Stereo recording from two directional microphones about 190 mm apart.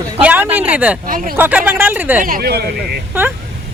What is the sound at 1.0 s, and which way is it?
Speech, 50° right (ahead or behind).